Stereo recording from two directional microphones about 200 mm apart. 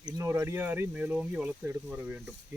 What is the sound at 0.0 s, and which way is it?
Speech, 15° right (ahead or behind).